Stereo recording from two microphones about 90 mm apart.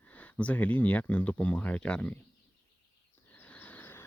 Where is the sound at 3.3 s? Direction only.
15° left (ahead or behind).